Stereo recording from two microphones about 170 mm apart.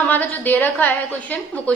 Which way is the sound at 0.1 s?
10° left (ahead or behind).